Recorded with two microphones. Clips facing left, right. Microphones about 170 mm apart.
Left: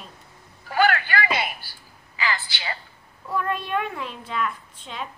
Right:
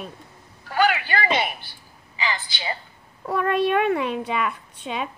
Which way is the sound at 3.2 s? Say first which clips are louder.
Right 6 dB; 65° right (ahead or behind).